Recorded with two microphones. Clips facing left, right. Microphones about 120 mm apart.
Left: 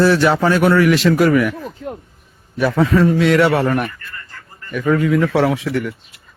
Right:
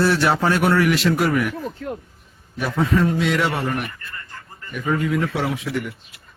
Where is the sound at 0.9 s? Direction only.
90° left.